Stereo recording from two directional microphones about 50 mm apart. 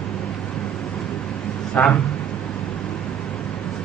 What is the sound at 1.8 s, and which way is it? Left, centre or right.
Speech, left.